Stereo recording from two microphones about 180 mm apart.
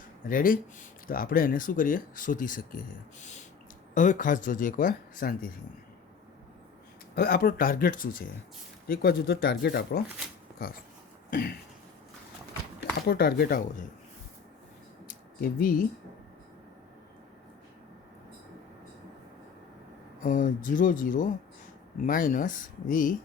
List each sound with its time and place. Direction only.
0.3 s speech: 50° left (ahead or behind)
7.2 s speech: 55° left (ahead or behind)
10.6 s speech: 55° left (ahead or behind)
11.3 s throat clearing: 55° left (ahead or behind)
13.1 s speech: 60° left (ahead or behind)
15.0 s a sound: 50° left (ahead or behind)
20.2 s speech: 45° left (ahead or behind)